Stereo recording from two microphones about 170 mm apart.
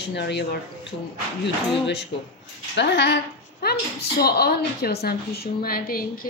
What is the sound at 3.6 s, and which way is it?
A woman's voice, 65° left (ahead or behind).